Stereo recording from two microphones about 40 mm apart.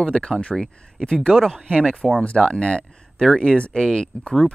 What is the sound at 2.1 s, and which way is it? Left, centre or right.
Speech, left.